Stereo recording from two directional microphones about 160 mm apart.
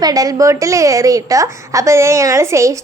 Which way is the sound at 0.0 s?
25° right (ahead or behind).